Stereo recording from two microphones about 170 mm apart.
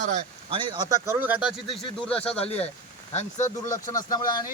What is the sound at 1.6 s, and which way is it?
Speech, 35° left (ahead or behind).